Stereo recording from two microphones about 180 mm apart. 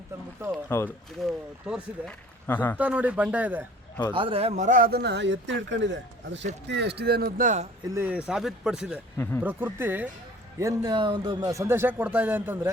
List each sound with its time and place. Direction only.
0.7 s speech: 10° left (ahead or behind)
1.3 s speech: 5° right (ahead or behind)
2.5 s speech: 10° left (ahead or behind)
2.7 s speech: 10° right (ahead or behind)
4.1 s speech: 30° right (ahead or behind); by 6.4 s 90° right
6.7 s speech: 70° right (ahead or behind); by 7.7 s 40° right (ahead or behind)
7.9 s speech: 10° right (ahead or behind)
9.1 s speech: 15° left (ahead or behind)
9.4 s speech: 10° right (ahead or behind)